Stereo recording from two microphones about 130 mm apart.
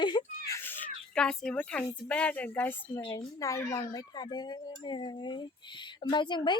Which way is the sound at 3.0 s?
30° left (ahead or behind).